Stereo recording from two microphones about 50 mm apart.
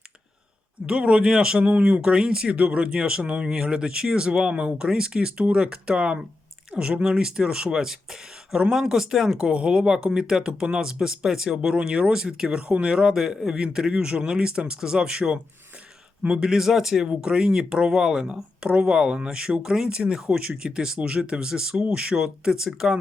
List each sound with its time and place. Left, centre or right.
0.9 s speech: right